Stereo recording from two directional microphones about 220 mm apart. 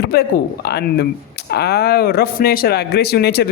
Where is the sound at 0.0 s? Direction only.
45° left (ahead or behind).